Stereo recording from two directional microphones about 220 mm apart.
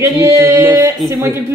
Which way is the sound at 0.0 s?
10° right (ahead or behind).